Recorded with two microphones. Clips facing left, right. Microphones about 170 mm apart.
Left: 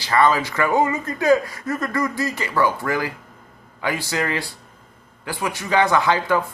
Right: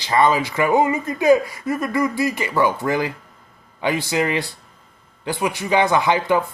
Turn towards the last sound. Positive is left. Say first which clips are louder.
# right 1 dB
turn(degrees=-15)  # may be behind; listen again after turning